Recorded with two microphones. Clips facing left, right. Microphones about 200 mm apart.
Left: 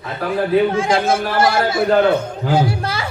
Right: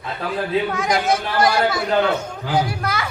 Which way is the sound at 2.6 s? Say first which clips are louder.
Left 3 dB; 30° left (ahead or behind).